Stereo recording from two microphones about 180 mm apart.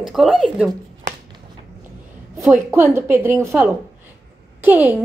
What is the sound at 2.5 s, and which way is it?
A woman's voice, 10° right (ahead or behind).